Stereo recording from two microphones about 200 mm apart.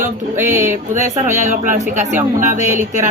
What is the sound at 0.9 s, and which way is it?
Speech, 35° right (ahead or behind).